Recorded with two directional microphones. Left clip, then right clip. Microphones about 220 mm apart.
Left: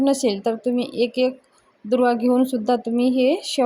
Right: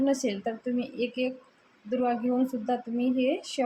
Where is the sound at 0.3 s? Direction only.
40° left (ahead or behind).